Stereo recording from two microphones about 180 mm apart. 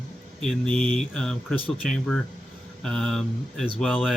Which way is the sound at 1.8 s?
5° left (ahead or behind).